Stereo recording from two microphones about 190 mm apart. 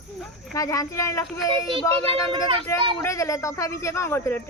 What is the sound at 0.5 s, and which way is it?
Speech, 15° left (ahead or behind).